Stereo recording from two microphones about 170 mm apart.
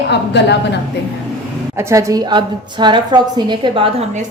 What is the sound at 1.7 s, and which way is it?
A woman's voice, 15° right (ahead or behind).